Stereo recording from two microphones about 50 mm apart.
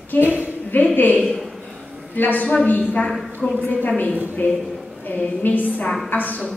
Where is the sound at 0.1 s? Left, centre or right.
Left.